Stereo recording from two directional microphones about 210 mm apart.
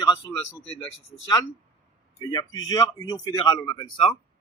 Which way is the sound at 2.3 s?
15° left (ahead or behind).